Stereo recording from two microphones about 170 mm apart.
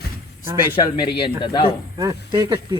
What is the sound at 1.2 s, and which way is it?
Speech, 30° left (ahead or behind).